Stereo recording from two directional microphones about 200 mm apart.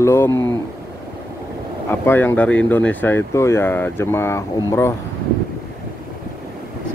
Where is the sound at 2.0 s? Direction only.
10° left (ahead or behind).